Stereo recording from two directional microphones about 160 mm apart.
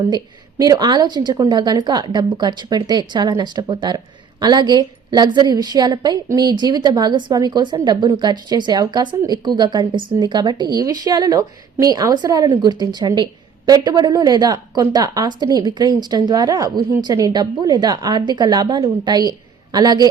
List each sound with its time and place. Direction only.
0.6 s a woman's voice: 25° right (ahead or behind)